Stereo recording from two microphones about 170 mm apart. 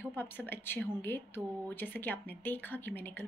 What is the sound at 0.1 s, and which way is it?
Speech, 10° left (ahead or behind).